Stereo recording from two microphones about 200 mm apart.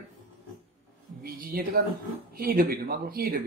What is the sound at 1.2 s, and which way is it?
A man's voice, 45° right (ahead or behind).